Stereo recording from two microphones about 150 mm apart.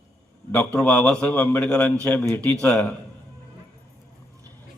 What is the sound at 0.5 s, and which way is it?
A man's voice, 10° left (ahead or behind).